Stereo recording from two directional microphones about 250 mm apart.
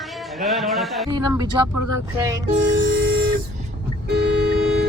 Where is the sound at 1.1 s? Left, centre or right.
Centre.